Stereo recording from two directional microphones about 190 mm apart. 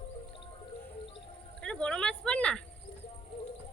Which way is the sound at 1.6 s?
5° left (ahead or behind).